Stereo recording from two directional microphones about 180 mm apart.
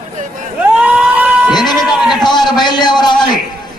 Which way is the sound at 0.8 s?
10° right (ahead or behind).